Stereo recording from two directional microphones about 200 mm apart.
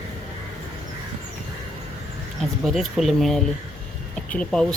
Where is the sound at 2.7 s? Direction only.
Centre (ahead or behind).